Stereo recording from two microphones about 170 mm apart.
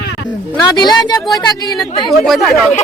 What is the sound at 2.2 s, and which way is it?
Speech, centre (ahead or behind).